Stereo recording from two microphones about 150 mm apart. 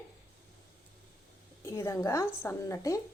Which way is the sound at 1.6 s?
20° left (ahead or behind).